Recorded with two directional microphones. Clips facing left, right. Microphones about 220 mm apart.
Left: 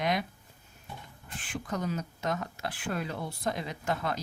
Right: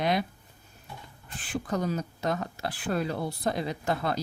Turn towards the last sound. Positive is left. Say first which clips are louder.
# right 3 dB
turn(degrees=-35)  # may be behind; listen again after turning